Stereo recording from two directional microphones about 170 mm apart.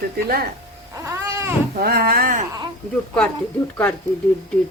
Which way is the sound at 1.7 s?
60° right (ahead or behind).